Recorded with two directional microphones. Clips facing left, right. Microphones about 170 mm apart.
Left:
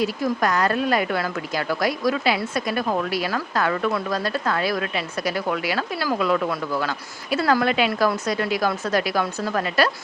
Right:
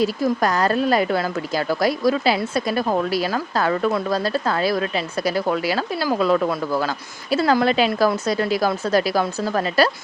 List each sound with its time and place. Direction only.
0.0 s speech: 35° right (ahead or behind)